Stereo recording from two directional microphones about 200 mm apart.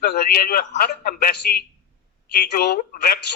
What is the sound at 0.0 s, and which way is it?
Speech, 50° left (ahead or behind).